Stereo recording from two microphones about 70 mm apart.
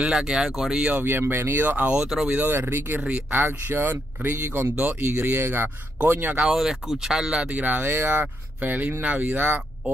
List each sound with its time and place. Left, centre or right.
0.0 s speech: centre
0.8 s speech: right
6.4 s speech: centre
7.5 s speech: right